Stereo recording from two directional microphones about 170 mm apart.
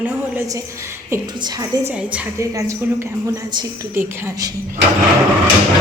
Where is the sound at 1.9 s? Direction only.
10° right (ahead or behind).